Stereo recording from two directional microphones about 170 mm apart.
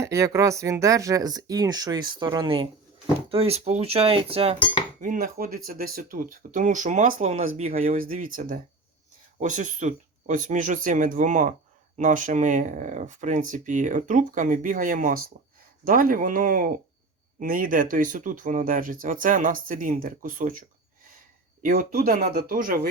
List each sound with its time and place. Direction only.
0.0 s speech: 15° right (ahead or behind); by 4.5 s 35° right (ahead or behind)
4.9 s speech: 50° right (ahead or behind)